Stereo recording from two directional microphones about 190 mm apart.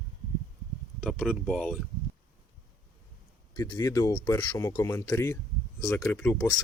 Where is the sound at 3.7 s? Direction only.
15° left (ahead or behind).